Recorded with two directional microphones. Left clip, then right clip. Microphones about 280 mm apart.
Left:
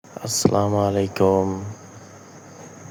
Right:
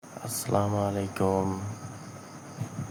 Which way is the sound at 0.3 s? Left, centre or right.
Left.